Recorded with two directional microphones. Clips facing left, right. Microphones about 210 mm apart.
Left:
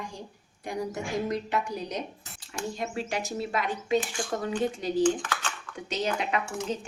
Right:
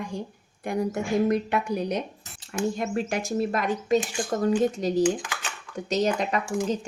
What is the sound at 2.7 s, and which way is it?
A woman's voice, 50° right (ahead or behind).